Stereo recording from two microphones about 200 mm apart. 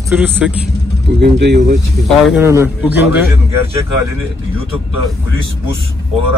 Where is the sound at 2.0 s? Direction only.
10° right (ahead or behind).